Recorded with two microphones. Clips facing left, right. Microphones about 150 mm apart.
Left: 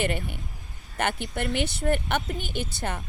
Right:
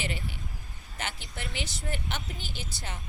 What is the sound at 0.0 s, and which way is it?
Speech, 55° left (ahead or behind).